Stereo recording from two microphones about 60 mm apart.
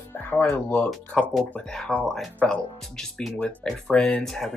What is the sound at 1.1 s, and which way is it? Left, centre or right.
Speech, centre.